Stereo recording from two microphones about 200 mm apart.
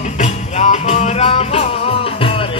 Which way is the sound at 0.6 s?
35° left (ahead or behind).